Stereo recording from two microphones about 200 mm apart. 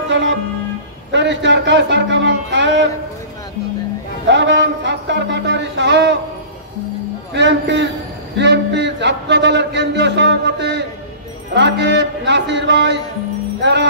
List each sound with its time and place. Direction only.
0.1 s music: 70° right (ahead or behind)
1.1 s a man's voice: 65° right (ahead or behind)
4.3 s a sound: 65° right (ahead or behind)
7.3 s a man's voice: 60° right (ahead or behind)
13.6 s music: 60° right (ahead or behind)